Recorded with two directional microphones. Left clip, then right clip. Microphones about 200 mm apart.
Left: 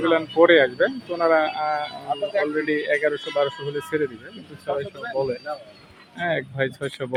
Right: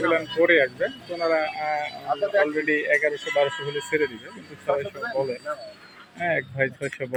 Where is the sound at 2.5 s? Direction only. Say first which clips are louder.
Even; 10° left (ahead or behind).